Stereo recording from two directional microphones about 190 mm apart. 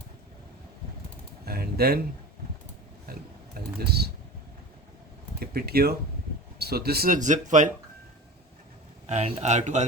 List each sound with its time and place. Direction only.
1.5 s speech: 55° right (ahead or behind)
3.8 s speech: 55° right (ahead or behind)
5.4 s speech: 55° right (ahead or behind)
9.0 s a man's voice: 35° right (ahead or behind)